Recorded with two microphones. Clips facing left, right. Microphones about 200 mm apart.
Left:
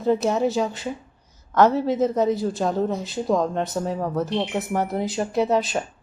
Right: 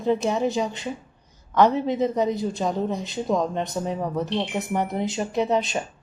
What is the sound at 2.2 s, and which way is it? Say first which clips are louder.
Speech: left 2 dB; 15° right (ahead or behind).